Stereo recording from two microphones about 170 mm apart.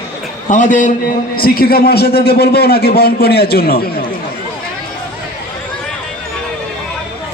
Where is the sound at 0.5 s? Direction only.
45° left (ahead or behind).